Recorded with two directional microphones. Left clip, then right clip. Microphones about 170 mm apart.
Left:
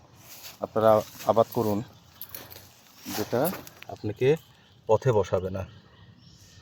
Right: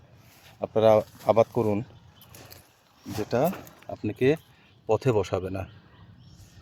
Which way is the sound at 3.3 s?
20° right (ahead or behind).